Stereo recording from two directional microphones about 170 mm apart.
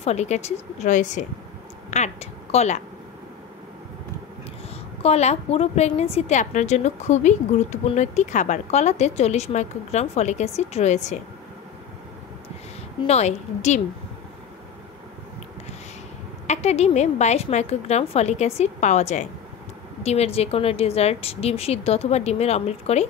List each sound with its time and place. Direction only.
0.0 s a woman's voice: 40° left (ahead or behind)
5.0 s a woman's voice: 40° left (ahead or behind)
13.0 s a woman's voice: 40° left (ahead or behind)
16.4 s a woman's voice: 40° left (ahead or behind)